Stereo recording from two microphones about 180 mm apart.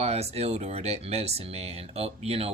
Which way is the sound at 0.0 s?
35° right (ahead or behind).